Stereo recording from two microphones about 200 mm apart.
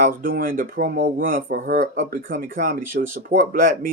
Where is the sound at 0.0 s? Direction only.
45° right (ahead or behind).